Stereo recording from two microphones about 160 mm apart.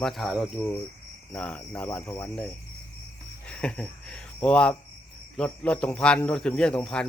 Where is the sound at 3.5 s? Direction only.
5° left (ahead or behind).